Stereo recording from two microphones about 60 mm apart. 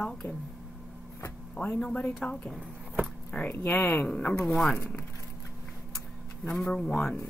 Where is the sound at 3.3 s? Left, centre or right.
Left.